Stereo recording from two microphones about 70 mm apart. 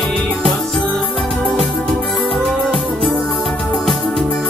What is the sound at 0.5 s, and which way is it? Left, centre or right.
Music, centre.